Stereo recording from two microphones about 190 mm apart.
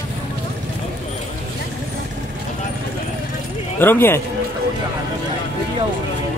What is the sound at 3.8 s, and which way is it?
Speech, 10° left (ahead or behind).